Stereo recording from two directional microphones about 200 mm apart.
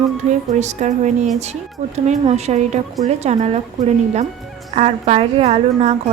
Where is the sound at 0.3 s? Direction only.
35° right (ahead or behind).